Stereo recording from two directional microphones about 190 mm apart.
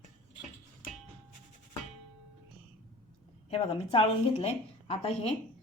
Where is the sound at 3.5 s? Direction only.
30° left (ahead or behind).